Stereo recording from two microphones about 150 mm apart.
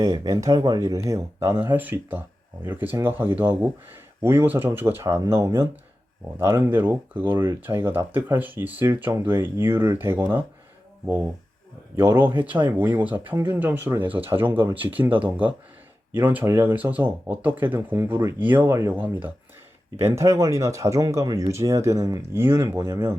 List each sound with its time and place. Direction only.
0.0 s speech: 25° right (ahead or behind)